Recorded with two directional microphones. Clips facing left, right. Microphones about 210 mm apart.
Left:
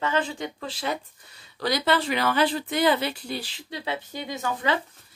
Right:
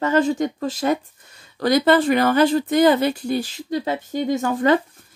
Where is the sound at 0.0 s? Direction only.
45° right (ahead or behind).